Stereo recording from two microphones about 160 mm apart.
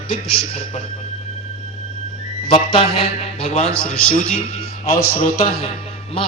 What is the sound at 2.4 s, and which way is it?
A man's voice, 40° left (ahead or behind).